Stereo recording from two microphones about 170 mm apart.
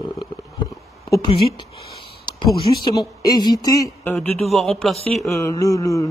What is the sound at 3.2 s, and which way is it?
Speech, 25° left (ahead or behind).